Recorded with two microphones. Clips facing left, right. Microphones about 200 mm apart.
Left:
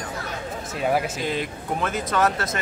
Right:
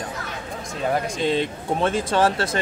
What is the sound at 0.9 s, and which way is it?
Speech, 5° left (ahead or behind).